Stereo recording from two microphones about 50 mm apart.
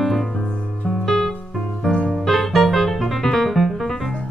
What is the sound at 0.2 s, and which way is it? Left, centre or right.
Music, left.